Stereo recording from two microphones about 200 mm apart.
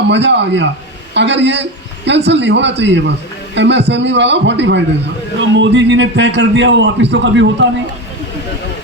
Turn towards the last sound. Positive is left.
turn(degrees=-65)  # may be behind; listen again after turning